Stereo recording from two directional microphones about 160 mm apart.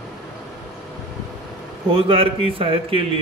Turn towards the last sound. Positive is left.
turn(degrees=-35)  # may be behind; listen again after turning